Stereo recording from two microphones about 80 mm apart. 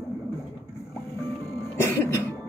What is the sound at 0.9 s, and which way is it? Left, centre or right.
Music, left.